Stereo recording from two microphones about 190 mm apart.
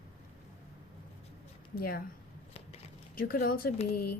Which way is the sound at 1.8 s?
50° left (ahead or behind).